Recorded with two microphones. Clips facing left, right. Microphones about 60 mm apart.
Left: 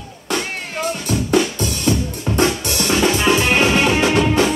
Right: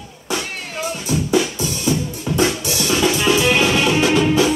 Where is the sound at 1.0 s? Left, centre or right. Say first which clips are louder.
Even; left.